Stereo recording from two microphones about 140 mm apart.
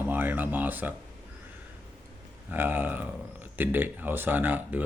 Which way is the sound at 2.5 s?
15° right (ahead or behind).